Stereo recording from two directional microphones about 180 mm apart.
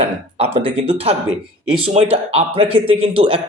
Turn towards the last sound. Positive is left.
turn(degrees=-30)  # may be behind; listen again after turning